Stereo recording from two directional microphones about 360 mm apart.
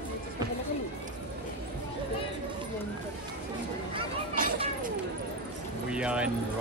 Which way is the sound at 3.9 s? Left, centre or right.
Centre.